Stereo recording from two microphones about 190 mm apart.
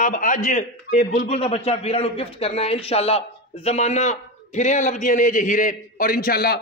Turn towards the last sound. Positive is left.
turn(degrees=55)  # may be behind; listen again after turning